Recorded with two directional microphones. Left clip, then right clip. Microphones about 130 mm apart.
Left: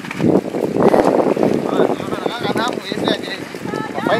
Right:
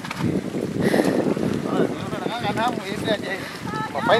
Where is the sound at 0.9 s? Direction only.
65° left (ahead or behind).